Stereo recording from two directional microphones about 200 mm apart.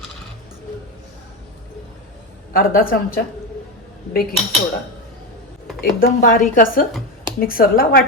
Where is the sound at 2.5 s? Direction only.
45° left (ahead or behind).